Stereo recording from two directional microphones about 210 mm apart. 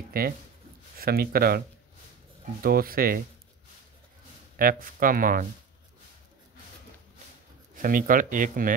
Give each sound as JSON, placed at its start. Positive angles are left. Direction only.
{"t": 0.2, "sound": "speech", "side_deg": -45}
{"t": 2.6, "sound": "speech", "side_deg": -45}
{"t": 4.6, "sound": "speech", "side_deg": -40}
{"t": 7.7, "sound": "speech", "side_deg": -40}